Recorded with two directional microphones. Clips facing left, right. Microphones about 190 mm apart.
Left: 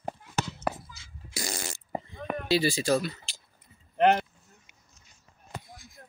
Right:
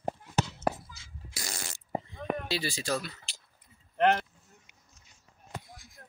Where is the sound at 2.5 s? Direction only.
5° left (ahead or behind).